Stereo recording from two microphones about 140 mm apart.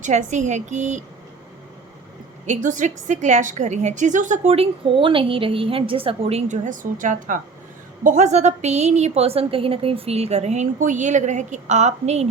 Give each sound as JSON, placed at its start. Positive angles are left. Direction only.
{"t": 0.0, "sound": "a woman's voice", "side_deg": -60}
{"t": 2.5, "sound": "a woman's voice", "side_deg": -65}
{"t": 6.5, "sound": "a woman's voice", "side_deg": -70}
{"t": 8.0, "sound": "a woman's voice", "side_deg": -60}